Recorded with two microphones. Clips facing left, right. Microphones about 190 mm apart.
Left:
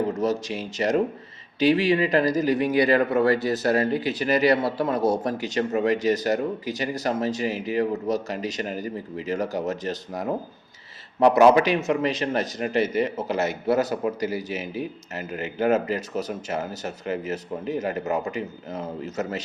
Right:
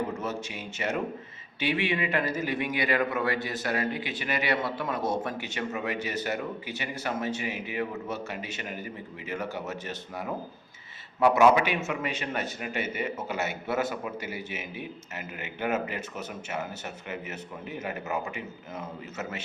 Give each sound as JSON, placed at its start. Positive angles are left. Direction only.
{"t": 0.1, "sound": "speech", "side_deg": 35}